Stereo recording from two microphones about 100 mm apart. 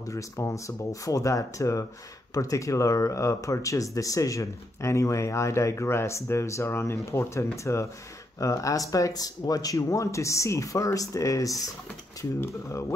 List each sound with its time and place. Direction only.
0.0 s speech: 30° left (ahead or behind)